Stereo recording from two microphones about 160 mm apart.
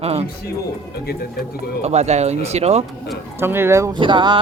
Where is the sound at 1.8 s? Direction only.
45° right (ahead or behind).